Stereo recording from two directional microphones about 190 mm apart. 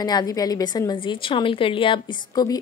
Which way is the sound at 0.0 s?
20° left (ahead or behind).